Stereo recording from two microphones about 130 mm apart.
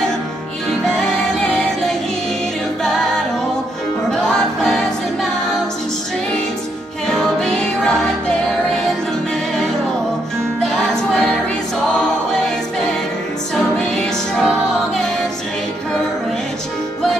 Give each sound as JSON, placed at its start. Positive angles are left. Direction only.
{"t": 0.8, "sound": "music", "side_deg": 5}
{"t": 4.1, "sound": "music", "side_deg": 5}
{"t": 7.1, "sound": "music", "side_deg": 5}
{"t": 10.6, "sound": "music", "side_deg": 5}
{"t": 13.6, "sound": "music", "side_deg": 5}